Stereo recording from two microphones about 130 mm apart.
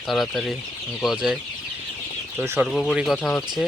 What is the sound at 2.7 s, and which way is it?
Speech, centre (ahead or behind).